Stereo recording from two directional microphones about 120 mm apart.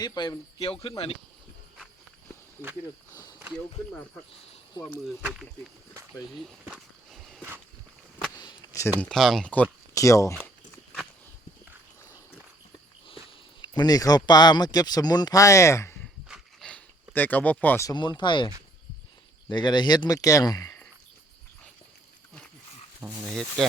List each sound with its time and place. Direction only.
0.0 s speech: 35° left (ahead or behind)
4.8 s a man's voice: 35° left (ahead or behind)
6.4 s a sound: 5° left (ahead or behind)
9.0 s speech: 5° left (ahead or behind)
9.9 s speech: 25° left (ahead or behind)
13.6 s a man's voice: 35° left (ahead or behind)
16.6 s a sound: 10° left (ahead or behind)
17.8 s a man's voice: 40° left (ahead or behind)
23.0 s speech: 5° right (ahead or behind)